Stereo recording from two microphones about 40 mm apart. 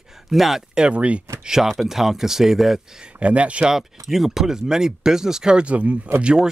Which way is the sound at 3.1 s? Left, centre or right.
Right.